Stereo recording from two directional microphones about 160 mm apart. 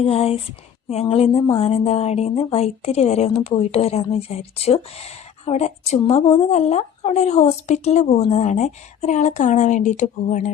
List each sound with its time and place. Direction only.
0.0 s a woman's voice: 40° left (ahead or behind)